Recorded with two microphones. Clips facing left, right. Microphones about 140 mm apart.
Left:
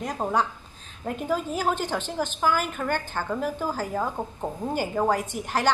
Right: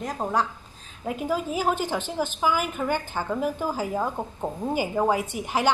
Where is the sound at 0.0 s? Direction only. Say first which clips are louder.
Even; centre (ahead or behind).